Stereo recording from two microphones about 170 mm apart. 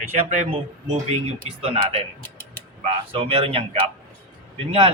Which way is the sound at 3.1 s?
35° right (ahead or behind).